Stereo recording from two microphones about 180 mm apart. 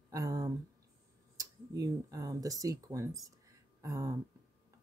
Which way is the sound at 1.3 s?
20° right (ahead or behind).